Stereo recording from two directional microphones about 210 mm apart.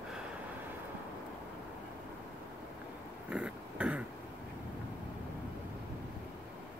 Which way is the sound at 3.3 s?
5° right (ahead or behind).